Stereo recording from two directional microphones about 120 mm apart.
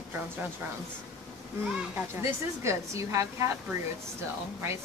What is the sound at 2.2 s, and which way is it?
Speech, 25° right (ahead or behind).